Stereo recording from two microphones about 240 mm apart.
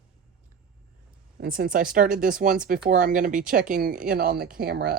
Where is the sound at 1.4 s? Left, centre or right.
Right.